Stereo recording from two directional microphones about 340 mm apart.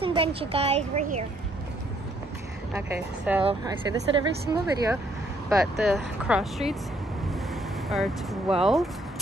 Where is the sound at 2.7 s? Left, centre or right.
Centre.